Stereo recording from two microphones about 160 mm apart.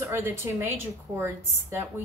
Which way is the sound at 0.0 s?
15° right (ahead or behind).